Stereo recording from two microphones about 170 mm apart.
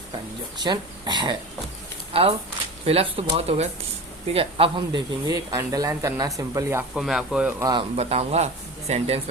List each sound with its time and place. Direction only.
0.6 s speech: 25° right (ahead or behind)
2.8 s speech: 35° right (ahead or behind); by 6.8 s 15° right (ahead or behind)
6.9 s speech: 5° right (ahead or behind)
7.6 s speech: 25° right (ahead or behind)
7.9 s speech: 40° right (ahead or behind)